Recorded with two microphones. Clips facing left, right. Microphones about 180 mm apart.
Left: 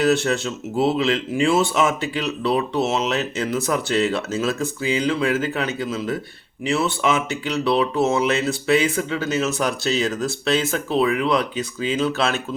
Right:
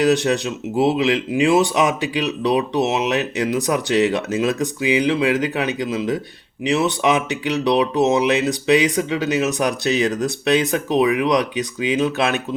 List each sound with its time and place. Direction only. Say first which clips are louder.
0.0 s speech: right 2 dB; 15° right (ahead or behind)